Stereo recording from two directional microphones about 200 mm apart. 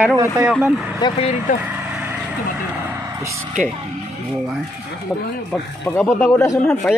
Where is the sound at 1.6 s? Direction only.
10° right (ahead or behind).